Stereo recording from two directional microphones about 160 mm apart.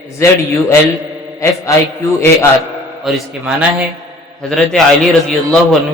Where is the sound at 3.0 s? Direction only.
Centre (ahead or behind).